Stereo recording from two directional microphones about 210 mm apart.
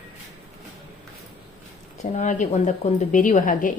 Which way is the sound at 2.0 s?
35° left (ahead or behind).